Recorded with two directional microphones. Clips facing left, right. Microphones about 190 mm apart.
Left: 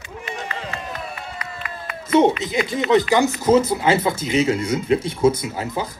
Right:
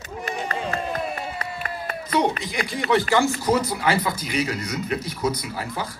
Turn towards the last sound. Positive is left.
turn(degrees=20)  # may be behind; listen again after turning